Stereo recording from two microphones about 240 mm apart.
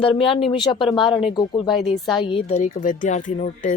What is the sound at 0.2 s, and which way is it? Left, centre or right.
Speech, left.